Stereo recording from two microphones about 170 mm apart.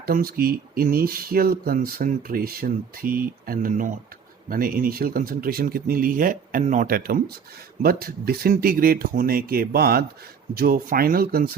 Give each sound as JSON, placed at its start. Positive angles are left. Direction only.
{"t": 0.0, "sound": "speech", "side_deg": -60}